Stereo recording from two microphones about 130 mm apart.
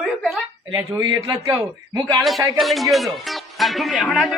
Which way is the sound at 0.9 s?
30° right (ahead or behind).